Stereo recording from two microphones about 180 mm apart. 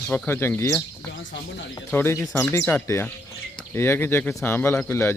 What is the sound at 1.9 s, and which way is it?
Speech, 15° left (ahead or behind).